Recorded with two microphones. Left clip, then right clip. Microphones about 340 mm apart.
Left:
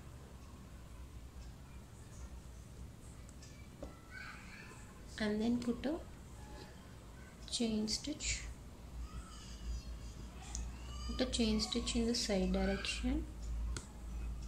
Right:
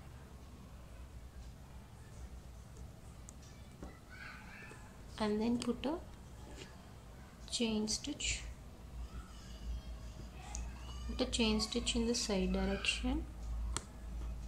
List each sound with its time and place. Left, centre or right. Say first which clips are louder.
5.1 s a woman's voice: right 1 dB; centre
7.4 s a sound: right 1 dB; centre
7.9 s speech: right 1 dB; centre
11.1 s speech: right 1 dB; centre